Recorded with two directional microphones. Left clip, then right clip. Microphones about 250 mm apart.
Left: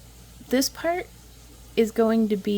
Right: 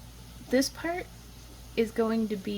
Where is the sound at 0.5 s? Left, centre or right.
Left.